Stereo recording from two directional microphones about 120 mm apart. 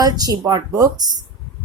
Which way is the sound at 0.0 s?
30° right (ahead or behind).